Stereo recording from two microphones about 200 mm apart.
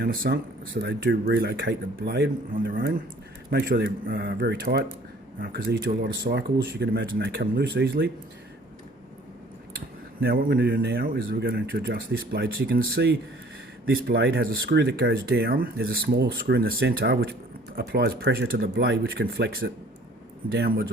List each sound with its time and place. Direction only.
0.0 s speech: 50° right (ahead or behind)
10.2 s speech: 50° right (ahead or behind)